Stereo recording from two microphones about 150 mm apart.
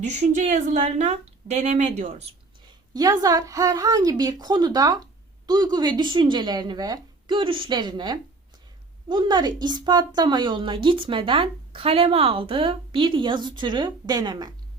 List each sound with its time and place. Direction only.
0.0 s a woman's voice: 50° right (ahead or behind)
2.9 s speech: 25° right (ahead or behind)